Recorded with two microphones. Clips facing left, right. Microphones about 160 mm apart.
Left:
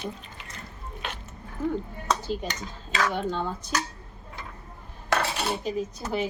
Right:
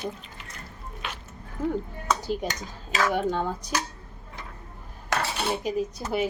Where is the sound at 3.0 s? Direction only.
10° right (ahead or behind).